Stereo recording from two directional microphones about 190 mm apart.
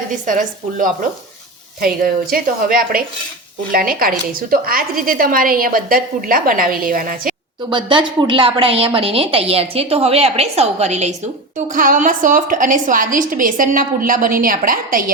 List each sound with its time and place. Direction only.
0.1 s a woman's voice: 45° right (ahead or behind)
7.7 s a woman's voice: 25° right (ahead or behind); by 15.1 s 45° right (ahead or behind)